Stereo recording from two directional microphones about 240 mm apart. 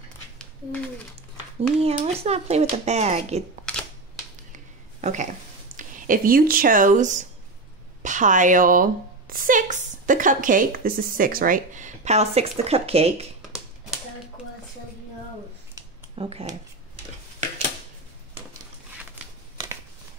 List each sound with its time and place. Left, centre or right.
1.8 s speech: right
5.0 s speech: right
13.5 s a sound: centre
15.7 s a sound: right
19.2 s crumpling: centre
19.5 s shuffling cards: centre